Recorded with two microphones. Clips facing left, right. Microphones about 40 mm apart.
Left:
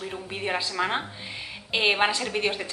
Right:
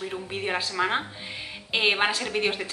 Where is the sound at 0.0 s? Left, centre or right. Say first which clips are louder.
Right 1 dB; centre.